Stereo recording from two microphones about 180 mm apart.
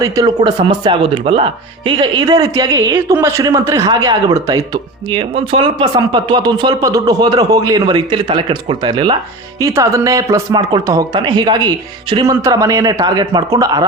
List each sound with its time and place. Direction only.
0.0 s speech: 20° right (ahead or behind)